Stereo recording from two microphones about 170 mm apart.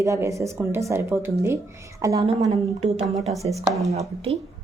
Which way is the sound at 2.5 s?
40° right (ahead or behind).